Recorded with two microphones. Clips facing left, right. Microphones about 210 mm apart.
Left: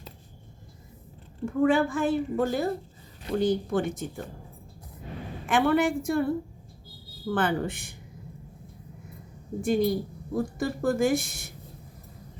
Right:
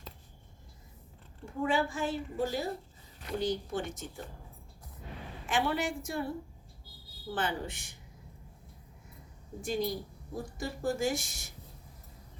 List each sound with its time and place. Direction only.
1.5 s speech: 55° left (ahead or behind)
5.5 s speech: 55° left (ahead or behind)
9.6 s speech: 55° left (ahead or behind)